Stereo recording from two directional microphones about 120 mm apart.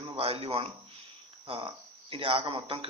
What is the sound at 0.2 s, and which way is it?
A man's voice, 55° right (ahead or behind).